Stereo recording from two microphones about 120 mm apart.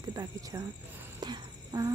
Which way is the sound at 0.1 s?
30° right (ahead or behind).